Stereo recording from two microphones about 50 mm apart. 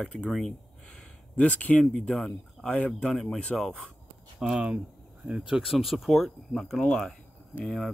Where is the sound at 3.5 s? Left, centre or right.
Centre.